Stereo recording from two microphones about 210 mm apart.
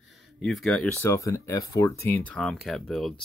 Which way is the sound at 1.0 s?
15° left (ahead or behind).